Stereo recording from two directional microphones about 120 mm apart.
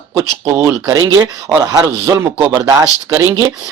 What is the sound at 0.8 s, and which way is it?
Speech, 35° right (ahead or behind).